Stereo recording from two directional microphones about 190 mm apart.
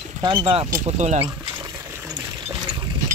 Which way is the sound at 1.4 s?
15° right (ahead or behind).